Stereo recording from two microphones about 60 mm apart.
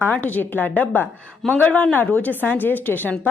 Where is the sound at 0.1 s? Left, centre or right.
Left.